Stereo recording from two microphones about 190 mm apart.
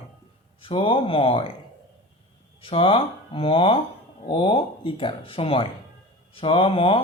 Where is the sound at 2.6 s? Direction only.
30° left (ahead or behind).